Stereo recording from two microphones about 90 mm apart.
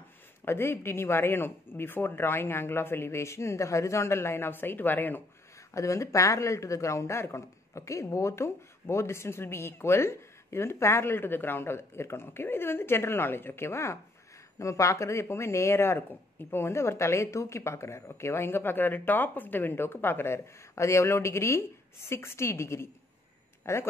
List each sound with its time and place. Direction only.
0.5 s speech: 25° left (ahead or behind)
5.7 s speech: 35° left (ahead or behind)